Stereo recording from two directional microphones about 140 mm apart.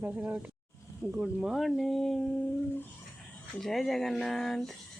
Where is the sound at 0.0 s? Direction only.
10° right (ahead or behind).